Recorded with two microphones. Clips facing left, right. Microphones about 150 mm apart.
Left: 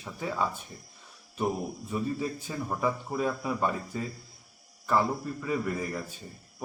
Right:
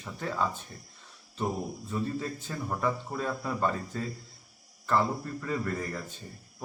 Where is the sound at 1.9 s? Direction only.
10° left (ahead or behind).